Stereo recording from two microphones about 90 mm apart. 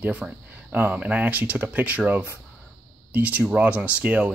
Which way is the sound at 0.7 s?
20° right (ahead or behind).